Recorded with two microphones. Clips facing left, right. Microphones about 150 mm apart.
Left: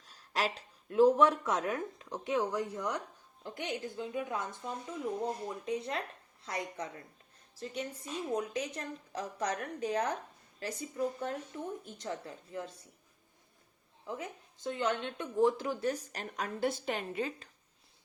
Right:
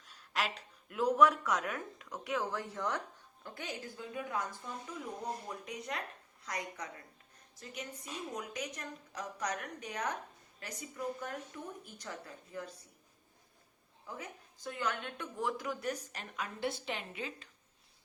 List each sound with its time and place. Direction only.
0.0 s speech: 35° left (ahead or behind)
5.6 s a woman's voice: 30° left (ahead or behind)
14.1 s speech: 25° left (ahead or behind); by 17.5 s 45° left (ahead or behind)